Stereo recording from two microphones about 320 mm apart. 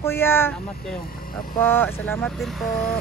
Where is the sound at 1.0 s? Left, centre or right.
Left.